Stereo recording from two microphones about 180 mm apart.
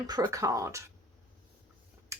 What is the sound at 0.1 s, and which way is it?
Speech, 20° right (ahead or behind).